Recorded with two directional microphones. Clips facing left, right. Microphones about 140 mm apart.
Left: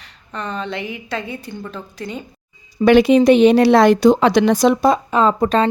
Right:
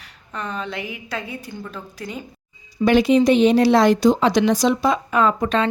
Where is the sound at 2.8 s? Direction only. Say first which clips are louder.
Left 4 dB; 70° left (ahead or behind).